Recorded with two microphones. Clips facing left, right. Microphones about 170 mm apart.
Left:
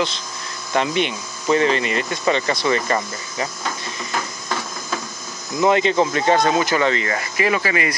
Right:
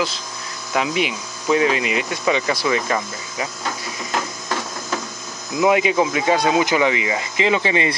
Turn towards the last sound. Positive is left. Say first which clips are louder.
# right 2 dB
turn(degrees=-25)  # may be behind; listen again after turning